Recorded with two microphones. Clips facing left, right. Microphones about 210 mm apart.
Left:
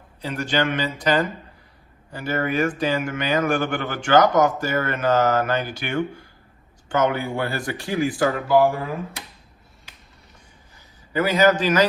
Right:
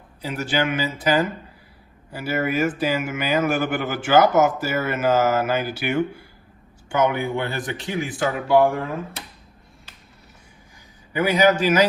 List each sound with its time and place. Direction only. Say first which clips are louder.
0.2 s speech: even; 10° right (ahead or behind)
8.4 s speech: right 1 dB; centre (ahead or behind)
11.1 s speech: even; 10° right (ahead or behind)